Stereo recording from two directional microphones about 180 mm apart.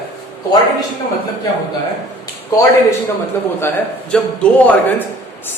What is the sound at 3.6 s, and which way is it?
A man's voice, 10° left (ahead or behind).